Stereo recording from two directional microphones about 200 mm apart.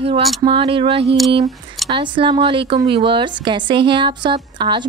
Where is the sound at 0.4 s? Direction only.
30° right (ahead or behind).